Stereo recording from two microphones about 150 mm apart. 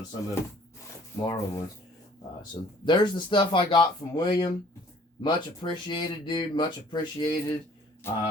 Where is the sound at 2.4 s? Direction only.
30° left (ahead or behind).